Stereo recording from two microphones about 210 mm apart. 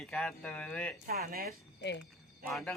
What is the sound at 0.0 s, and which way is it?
Speech, centre (ahead or behind).